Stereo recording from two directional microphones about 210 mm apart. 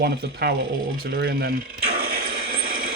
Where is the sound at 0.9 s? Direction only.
45° right (ahead or behind).